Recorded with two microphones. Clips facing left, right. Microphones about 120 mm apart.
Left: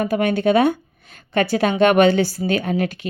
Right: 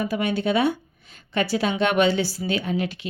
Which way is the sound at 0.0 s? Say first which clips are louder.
Left 6 dB; 55° left (ahead or behind).